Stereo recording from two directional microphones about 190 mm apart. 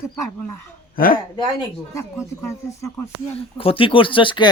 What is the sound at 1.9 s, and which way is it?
Speech, 15° left (ahead or behind).